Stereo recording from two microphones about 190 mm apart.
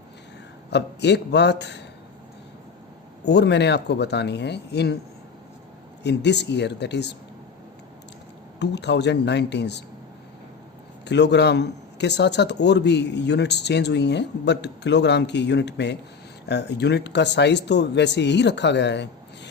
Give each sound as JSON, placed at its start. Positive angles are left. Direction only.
{"t": 0.7, "sound": "a man's voice", "side_deg": 65}
{"t": 3.2, "sound": "a man's voice", "side_deg": 65}
{"t": 6.0, "sound": "a man's voice", "side_deg": 65}
{"t": 8.5, "sound": "a man's voice", "side_deg": 65}
{"t": 11.0, "sound": "a man's voice", "side_deg": 65}